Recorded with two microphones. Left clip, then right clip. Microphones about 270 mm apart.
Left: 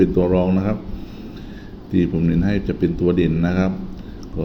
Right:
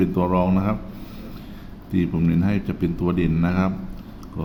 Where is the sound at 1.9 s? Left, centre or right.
Centre.